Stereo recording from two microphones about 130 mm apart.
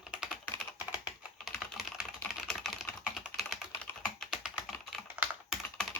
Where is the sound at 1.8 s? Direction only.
Centre (ahead or behind).